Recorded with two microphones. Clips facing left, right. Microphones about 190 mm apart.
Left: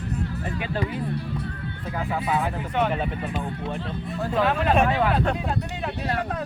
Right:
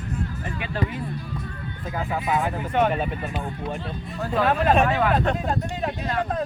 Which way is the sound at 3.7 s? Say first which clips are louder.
Left 1 dB; centre (ahead or behind).